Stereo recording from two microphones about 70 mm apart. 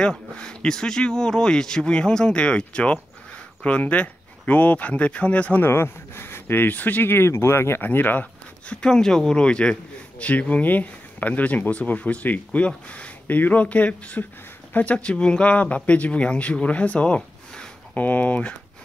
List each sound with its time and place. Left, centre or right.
0.0 s a man's voice: centre
5.6 s speech: left
7.8 s speech: left
8.8 s a man's voice: centre